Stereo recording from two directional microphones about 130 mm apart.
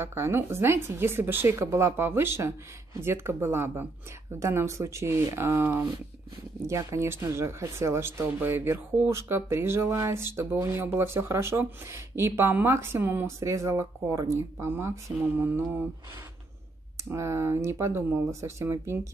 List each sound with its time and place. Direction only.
0.0 s speech: 20° right (ahead or behind)
17.1 s speech: 20° right (ahead or behind)